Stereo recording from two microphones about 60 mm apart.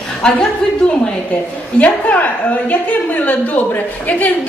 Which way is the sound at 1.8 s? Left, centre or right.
Left.